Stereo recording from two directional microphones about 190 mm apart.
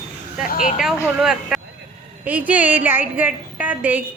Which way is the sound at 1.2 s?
Centre (ahead or behind).